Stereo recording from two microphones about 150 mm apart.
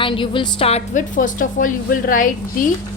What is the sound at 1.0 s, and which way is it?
A woman's voice, 60° left (ahead or behind).